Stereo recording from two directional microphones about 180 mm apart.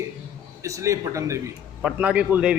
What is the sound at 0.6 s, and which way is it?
Speech, 15° right (ahead or behind).